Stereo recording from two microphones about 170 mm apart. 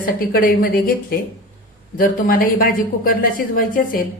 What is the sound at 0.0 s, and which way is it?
Speech, 55° left (ahead or behind).